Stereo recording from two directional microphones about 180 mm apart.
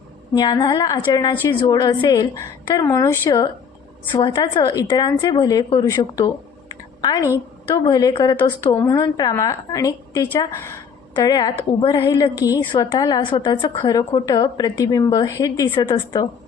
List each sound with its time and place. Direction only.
0.3 s a woman's voice: 25° left (ahead or behind)
8.4 s a woman's voice: 10° left (ahead or behind)